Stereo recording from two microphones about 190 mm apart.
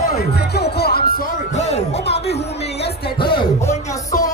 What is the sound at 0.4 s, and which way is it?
Music, 55° left (ahead or behind).